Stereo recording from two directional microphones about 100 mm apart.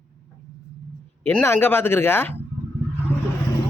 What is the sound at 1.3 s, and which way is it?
Speech, 20° left (ahead or behind).